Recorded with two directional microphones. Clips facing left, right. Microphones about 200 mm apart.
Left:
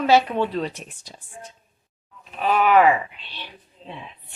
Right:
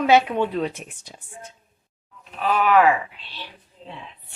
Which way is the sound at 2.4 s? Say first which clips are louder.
Left 1 dB; 10° left (ahead or behind).